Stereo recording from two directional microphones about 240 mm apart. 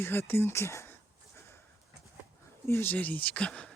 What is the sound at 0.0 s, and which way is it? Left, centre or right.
Speech, centre.